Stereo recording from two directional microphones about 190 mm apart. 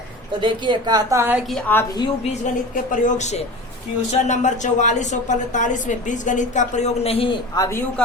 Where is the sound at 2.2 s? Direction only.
40° left (ahead or behind); by 7.8 s 20° left (ahead or behind).